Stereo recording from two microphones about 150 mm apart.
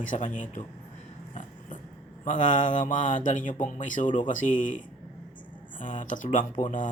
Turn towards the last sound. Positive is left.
turn(degrees=60)  # may be behind; listen again after turning